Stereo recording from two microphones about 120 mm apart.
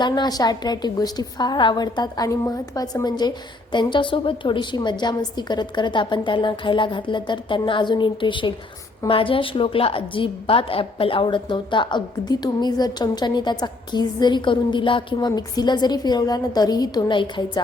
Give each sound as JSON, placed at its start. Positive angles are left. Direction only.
{"t": 0.0, "sound": "a woman's voice", "side_deg": 35}